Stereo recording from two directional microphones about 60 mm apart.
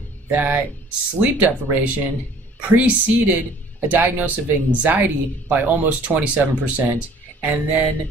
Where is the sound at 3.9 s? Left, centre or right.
Right.